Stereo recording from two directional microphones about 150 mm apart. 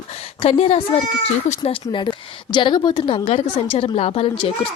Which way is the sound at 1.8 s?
30° left (ahead or behind).